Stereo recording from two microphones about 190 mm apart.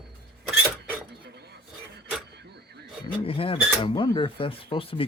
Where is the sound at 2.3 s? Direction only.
60° right (ahead or behind).